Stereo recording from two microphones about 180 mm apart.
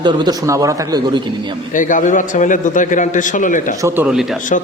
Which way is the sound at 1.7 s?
45° left (ahead or behind).